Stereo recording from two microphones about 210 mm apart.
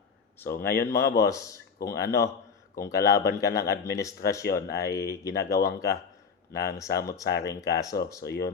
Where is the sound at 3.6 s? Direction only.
50° left (ahead or behind).